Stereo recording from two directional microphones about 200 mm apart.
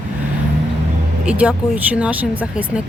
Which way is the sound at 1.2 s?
5° right (ahead or behind).